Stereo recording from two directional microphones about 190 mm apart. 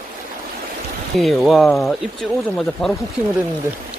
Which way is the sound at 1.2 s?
Centre (ahead or behind).